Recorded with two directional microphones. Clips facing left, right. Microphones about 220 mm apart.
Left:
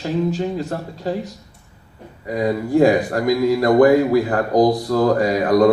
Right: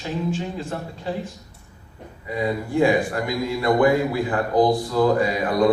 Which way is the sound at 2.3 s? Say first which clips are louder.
Left 5 dB; 40° left (ahead or behind).